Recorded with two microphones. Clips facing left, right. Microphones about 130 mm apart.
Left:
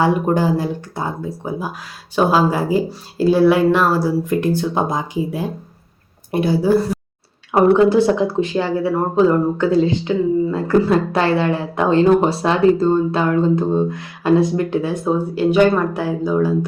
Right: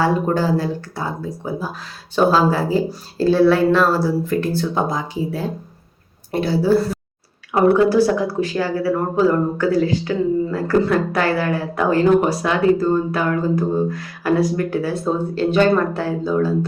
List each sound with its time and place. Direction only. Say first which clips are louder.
0.0 s speech: left 2 dB; 15° left (ahead or behind)